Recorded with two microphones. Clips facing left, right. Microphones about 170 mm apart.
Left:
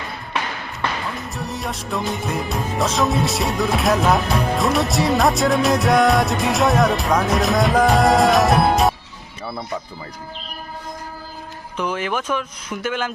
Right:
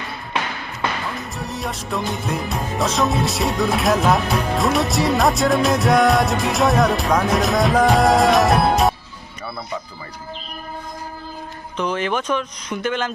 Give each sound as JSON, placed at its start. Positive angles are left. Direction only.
{"t": 1.4, "sound": "music", "side_deg": 0}
{"t": 11.8, "sound": "speech", "side_deg": 10}